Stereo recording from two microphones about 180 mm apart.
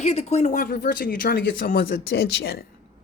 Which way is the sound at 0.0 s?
35° left (ahead or behind).